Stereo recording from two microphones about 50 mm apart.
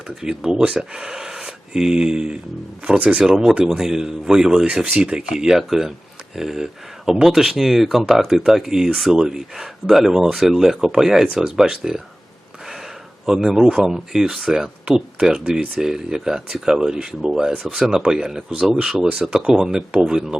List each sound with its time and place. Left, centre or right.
0.1 s speech: centre
13.2 s speech: centre
17.6 s speech: centre
17.9 s speech: centre